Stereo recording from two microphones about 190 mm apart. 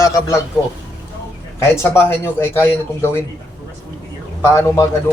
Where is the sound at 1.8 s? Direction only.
10° left (ahead or behind).